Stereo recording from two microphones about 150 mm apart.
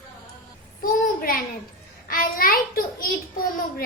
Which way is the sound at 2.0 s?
70° left (ahead or behind).